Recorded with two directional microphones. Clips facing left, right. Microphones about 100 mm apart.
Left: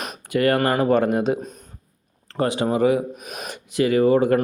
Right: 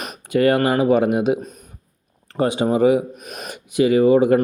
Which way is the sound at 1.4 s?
5° right (ahead or behind).